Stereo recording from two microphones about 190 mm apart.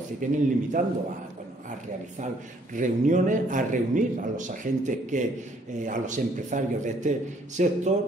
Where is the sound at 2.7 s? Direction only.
40° right (ahead or behind).